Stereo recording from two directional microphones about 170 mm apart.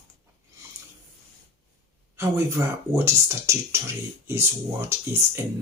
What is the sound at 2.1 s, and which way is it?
Speech, 15° right (ahead or behind).